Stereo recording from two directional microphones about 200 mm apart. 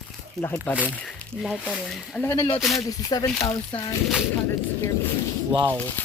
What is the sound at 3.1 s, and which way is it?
Speech, 20° left (ahead or behind).